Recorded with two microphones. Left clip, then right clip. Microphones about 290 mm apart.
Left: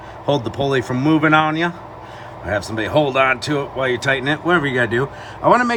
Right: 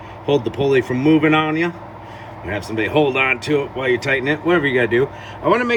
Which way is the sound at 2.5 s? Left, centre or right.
Left.